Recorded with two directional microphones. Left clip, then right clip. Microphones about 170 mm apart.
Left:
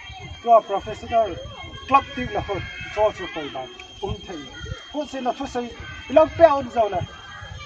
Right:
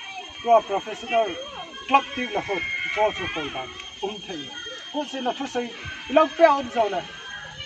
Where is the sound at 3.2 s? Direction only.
30° right (ahead or behind).